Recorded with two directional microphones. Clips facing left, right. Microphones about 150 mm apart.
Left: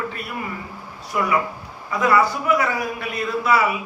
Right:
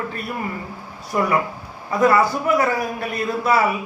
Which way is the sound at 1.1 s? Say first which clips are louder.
Right 2 dB; 40° right (ahead or behind).